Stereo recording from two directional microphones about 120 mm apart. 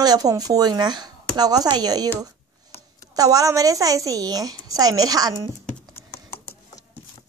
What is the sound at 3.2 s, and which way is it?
A woman's voice, 30° right (ahead or behind).